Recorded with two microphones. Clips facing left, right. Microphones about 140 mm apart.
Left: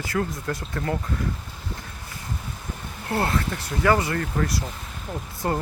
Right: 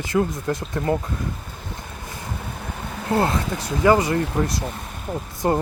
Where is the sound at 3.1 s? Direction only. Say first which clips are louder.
Right 4 dB; 20° right (ahead or behind).